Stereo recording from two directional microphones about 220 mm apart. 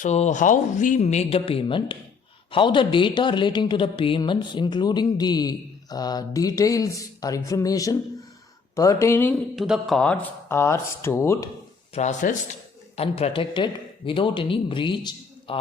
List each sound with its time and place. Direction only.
0.0 s speech: 30° left (ahead or behind); by 9.3 s 10° left (ahead or behind)
9.6 s speech: centre (ahead or behind)
11.9 s speech: 35° left (ahead or behind)